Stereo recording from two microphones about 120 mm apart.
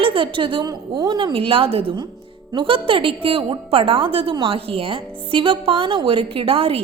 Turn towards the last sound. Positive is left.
turn(degrees=-50)  # may be behind; listen again after turning